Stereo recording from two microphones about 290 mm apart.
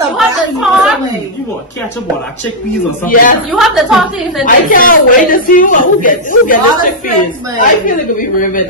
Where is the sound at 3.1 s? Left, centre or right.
Left.